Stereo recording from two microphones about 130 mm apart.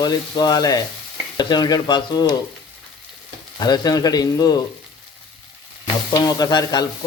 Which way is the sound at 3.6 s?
30° left (ahead or behind).